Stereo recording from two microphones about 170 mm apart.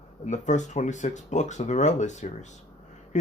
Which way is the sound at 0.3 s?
45° left (ahead or behind).